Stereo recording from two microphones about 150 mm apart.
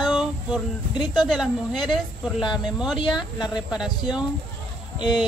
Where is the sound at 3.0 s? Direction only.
30° left (ahead or behind).